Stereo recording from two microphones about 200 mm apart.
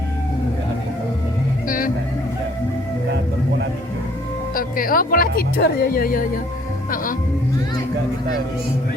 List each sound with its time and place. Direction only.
1.6 s music: 45° left (ahead or behind)
4.5 s speech: 45° left (ahead or behind)